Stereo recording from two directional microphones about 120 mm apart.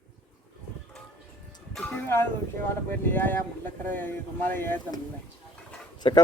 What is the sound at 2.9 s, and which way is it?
Speech, 15° left (ahead or behind).